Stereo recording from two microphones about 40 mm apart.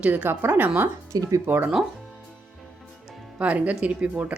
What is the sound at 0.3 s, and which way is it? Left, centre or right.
Speech, right.